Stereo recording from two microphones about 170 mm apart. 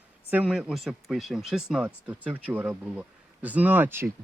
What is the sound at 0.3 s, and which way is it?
Speech, 5° right (ahead or behind).